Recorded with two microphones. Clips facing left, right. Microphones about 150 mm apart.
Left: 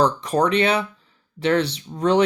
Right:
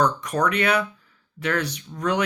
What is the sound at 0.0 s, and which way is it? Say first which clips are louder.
Speech: left 3 dB; 30° left (ahead or behind).